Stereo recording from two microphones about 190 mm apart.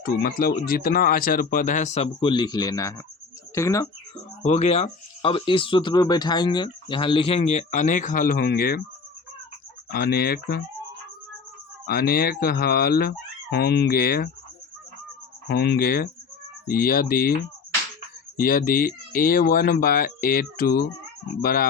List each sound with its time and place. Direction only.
0.0 s speech: 50° left (ahead or behind); by 3.8 s 15° left (ahead or behind)
4.4 s speech: 35° left (ahead or behind); by 8.8 s 50° left (ahead or behind)
9.9 s speech: 55° left (ahead or behind)
11.9 s speech: 55° left (ahead or behind)
15.4 s speech: 55° left (ahead or behind)
18.3 s speech: 50° left (ahead or behind)